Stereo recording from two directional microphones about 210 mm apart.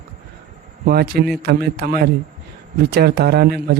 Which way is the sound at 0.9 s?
50° right (ahead or behind).